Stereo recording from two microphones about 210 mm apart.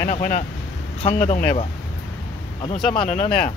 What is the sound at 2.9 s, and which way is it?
Speech, 25° left (ahead or behind).